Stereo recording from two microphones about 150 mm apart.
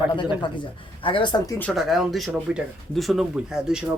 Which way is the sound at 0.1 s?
30° left (ahead or behind).